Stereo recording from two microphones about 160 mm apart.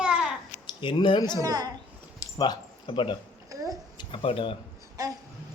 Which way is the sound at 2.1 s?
25° left (ahead or behind).